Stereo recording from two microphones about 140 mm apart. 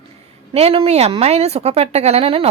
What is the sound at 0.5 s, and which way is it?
Speech, 45° right (ahead or behind).